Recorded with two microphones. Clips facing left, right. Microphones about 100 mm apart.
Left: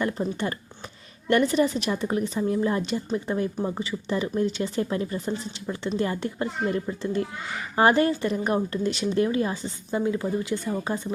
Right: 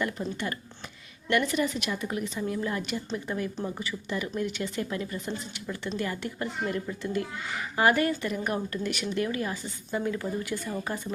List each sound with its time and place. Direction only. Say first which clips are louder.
0.2 s a woman's voice: left 5 dB; 25° left (ahead or behind)